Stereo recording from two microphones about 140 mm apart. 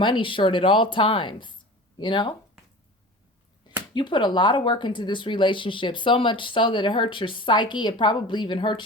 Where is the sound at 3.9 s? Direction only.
35° left (ahead or behind).